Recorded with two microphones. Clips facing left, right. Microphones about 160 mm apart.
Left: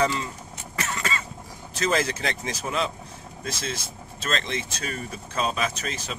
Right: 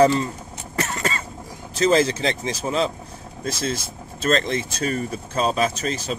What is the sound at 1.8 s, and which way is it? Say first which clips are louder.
Speech: right 7 dB; 30° right (ahead or behind).